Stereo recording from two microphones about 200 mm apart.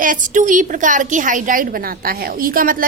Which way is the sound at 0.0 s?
40° right (ahead or behind).